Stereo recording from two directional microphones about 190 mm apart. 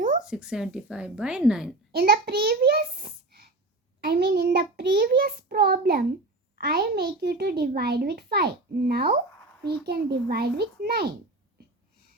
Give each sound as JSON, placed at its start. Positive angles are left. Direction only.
{"t": 0.3, "sound": "a woman's voice", "side_deg": -5}
{"t": 1.9, "sound": "a sound", "side_deg": -55}
{"t": 4.0, "sound": "a child's voice", "side_deg": -55}